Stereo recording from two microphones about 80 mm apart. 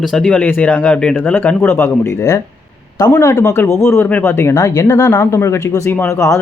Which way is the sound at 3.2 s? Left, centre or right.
Left.